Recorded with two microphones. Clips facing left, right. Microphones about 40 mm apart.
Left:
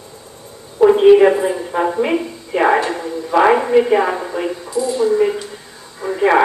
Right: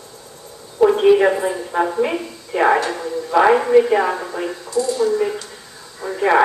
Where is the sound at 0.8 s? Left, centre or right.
Centre.